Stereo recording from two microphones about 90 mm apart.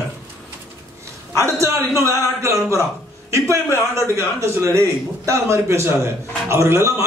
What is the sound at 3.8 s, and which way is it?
A man's voice, 30° right (ahead or behind).